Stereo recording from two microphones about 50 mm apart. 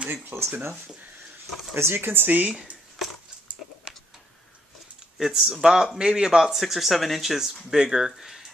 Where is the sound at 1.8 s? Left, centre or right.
Right.